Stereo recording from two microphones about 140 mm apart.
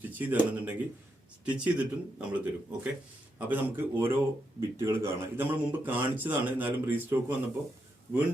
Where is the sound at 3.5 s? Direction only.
15° right (ahead or behind).